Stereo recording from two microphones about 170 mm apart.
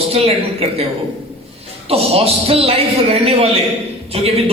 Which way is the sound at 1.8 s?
35° right (ahead or behind).